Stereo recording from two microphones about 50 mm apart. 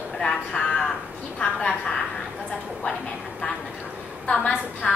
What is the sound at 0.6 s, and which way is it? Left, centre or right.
Speech, left.